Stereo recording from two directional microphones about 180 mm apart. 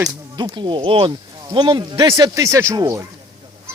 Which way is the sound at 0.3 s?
25° right (ahead or behind).